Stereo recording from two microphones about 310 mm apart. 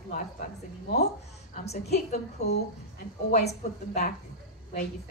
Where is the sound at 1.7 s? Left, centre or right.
Left.